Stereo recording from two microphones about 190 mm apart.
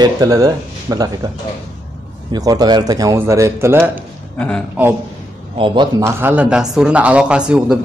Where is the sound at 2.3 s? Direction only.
20° right (ahead or behind).